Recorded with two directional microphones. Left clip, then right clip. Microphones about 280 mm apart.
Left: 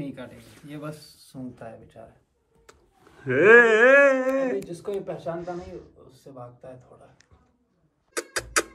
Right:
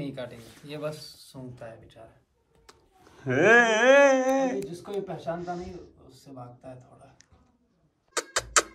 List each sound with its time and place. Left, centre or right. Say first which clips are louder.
0.0 s speech: right 1 dB; centre
1.3 s speech: left 5 dB; centre
4.6 s speech: left 3 dB; left
5.4 s speech: left 1 dB; centre
6.2 s speech: left 2 dB; left
8.1 s a sound: right 1 dB; centre